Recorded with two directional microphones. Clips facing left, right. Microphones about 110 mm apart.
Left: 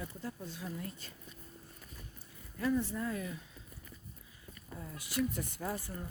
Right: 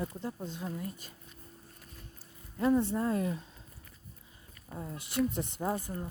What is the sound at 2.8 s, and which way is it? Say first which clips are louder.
Speech: right 7 dB; 30° right (ahead or behind).